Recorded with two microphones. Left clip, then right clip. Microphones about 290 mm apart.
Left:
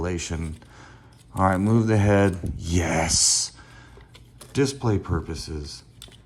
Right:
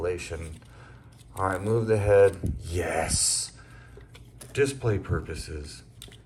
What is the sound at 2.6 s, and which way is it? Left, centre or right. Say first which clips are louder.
Speech: left 3 dB; left.